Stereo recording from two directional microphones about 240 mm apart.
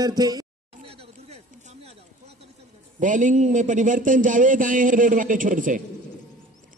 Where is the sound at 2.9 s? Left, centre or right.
Right.